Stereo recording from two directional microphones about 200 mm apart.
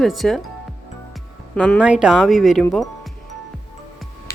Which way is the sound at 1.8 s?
5° right (ahead or behind).